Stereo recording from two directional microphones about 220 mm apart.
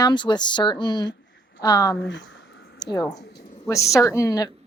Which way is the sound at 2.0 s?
55° left (ahead or behind).